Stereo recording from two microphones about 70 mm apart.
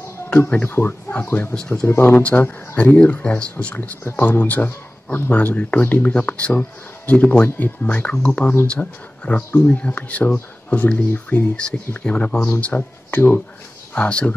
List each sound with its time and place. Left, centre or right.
0.7 s speech: left
1.5 s speech: centre
1.9 s speech: left
13.9 s speech: centre